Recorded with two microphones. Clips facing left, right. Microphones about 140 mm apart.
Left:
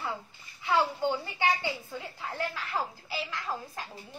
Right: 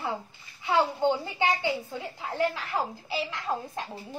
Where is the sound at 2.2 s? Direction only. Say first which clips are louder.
Right 7 dB; 20° right (ahead or behind).